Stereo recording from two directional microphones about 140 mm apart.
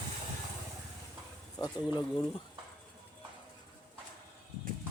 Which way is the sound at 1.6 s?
30° left (ahead or behind).